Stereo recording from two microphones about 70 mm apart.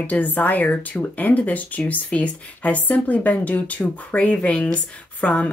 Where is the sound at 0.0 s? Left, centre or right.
Left.